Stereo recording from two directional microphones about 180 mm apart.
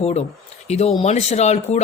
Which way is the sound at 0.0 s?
35° left (ahead or behind).